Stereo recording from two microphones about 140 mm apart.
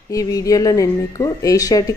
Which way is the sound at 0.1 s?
25° left (ahead or behind).